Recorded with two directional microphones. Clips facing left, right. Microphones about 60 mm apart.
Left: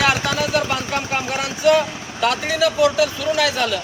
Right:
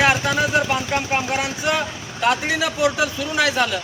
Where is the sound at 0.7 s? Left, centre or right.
Centre.